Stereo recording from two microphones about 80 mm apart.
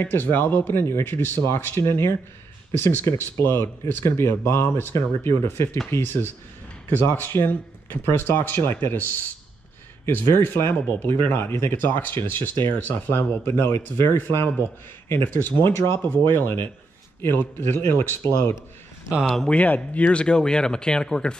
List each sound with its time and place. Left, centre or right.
0.0 s speech: left
19.5 s speech: centre